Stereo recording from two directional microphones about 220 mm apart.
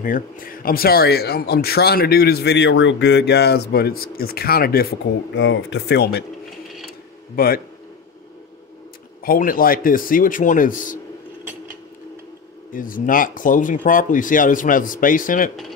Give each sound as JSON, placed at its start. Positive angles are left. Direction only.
{"t": 0.0, "sound": "speech", "side_deg": 40}
{"t": 5.3, "sound": "speech", "side_deg": 55}
{"t": 7.3, "sound": "speech", "side_deg": 40}
{"t": 9.2, "sound": "speech", "side_deg": 40}
{"t": 12.7, "sound": "speech", "side_deg": 40}